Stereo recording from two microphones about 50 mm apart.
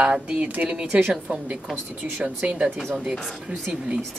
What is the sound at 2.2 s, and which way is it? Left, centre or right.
Speech, right.